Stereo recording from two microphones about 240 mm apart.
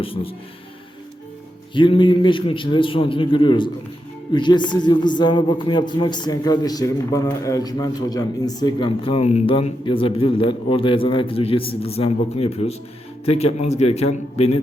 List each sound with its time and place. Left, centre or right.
0.0 s a man's voice: left
1.7 s a man's voice: centre